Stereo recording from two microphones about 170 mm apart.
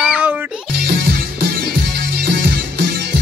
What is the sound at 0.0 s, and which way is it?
Music, 10° right (ahead or behind).